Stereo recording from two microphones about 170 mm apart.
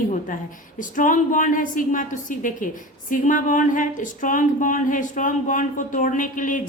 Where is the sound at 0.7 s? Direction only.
50° left (ahead or behind).